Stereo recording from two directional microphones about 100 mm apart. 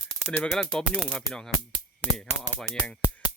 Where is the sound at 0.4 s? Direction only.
Centre (ahead or behind).